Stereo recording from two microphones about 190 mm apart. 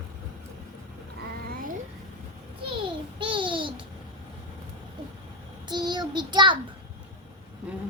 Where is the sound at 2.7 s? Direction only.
25° right (ahead or behind).